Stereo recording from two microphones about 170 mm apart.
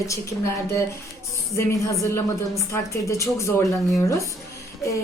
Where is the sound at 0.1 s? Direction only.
15° left (ahead or behind).